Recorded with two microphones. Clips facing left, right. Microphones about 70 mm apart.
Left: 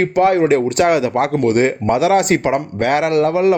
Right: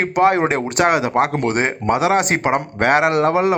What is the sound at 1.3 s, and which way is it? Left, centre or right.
Speech, right.